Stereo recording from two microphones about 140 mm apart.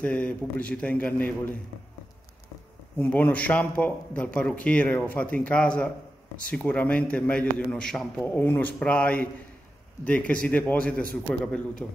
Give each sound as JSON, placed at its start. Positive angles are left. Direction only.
{"t": 0.0, "sound": "speech", "side_deg": 10}
{"t": 3.0, "sound": "speech", "side_deg": 10}